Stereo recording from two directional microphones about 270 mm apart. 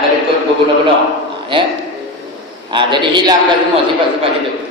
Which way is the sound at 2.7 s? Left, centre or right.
Centre.